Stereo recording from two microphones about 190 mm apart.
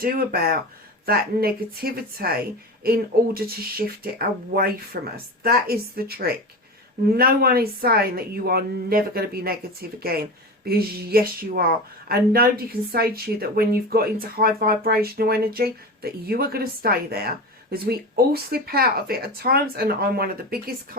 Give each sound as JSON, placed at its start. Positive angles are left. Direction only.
{"t": 0.0, "sound": "a woman's voice", "side_deg": -50}